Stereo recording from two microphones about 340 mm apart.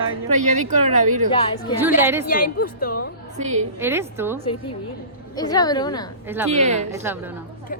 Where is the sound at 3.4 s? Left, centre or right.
Right.